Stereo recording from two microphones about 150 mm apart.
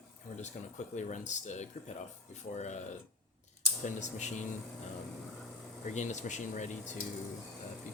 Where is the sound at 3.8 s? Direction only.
55° left (ahead or behind).